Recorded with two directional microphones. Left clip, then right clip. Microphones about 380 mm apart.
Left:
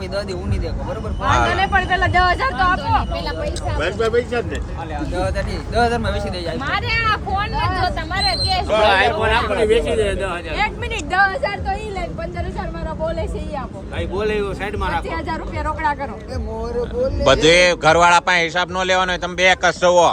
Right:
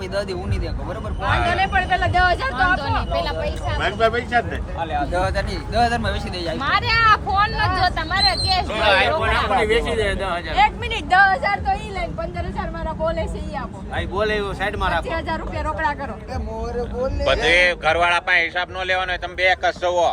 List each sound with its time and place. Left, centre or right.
1.5 s speech: left
3.8 s speech: centre
8.7 s speech: left
9.6 s speech: centre
14.2 s speech: centre
17.2 s speech: centre